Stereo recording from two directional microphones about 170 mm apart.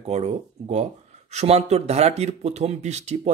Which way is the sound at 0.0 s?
40° right (ahead or behind).